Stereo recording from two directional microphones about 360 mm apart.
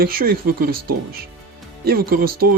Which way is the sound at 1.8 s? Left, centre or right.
Right.